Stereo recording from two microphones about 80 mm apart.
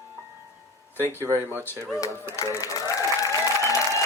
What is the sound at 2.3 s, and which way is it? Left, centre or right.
Applause, left.